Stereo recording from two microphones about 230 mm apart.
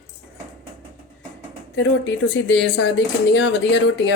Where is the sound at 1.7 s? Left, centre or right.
Left.